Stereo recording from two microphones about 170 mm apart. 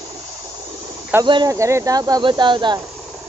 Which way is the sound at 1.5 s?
15° right (ahead or behind).